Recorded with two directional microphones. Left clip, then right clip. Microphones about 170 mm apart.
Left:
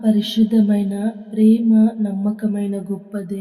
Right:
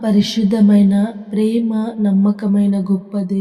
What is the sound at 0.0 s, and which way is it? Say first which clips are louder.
Music: right 2 dB; 35° right (ahead or behind).